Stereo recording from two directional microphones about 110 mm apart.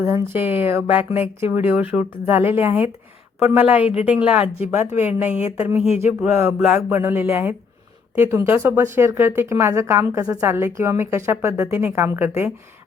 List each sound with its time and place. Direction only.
0.0 s speech: 25° right (ahead or behind)